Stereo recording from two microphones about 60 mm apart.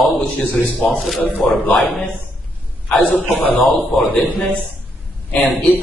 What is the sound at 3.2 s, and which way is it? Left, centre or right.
Speech, right.